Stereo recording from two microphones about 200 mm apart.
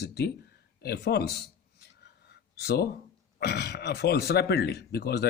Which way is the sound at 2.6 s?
50° left (ahead or behind).